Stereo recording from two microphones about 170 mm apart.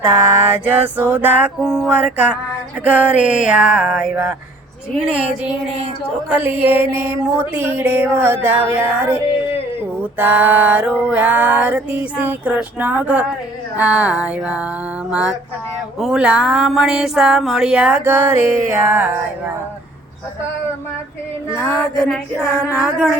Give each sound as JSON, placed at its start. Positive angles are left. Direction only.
{"t": 0.0, "sound": "music", "side_deg": -20}
{"t": 1.1, "sound": "speech", "side_deg": -10}
{"t": 2.8, "sound": "music", "side_deg": -10}
{"t": 16.0, "sound": "speech", "side_deg": -5}
{"t": 22.0, "sound": "speech", "side_deg": 5}
{"t": 22.7, "sound": "music", "side_deg": -10}